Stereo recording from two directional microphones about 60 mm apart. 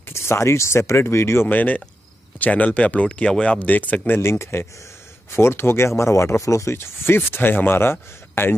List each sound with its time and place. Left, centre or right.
0.1 s speech: left
1.5 s speech: left
4.2 s speech: left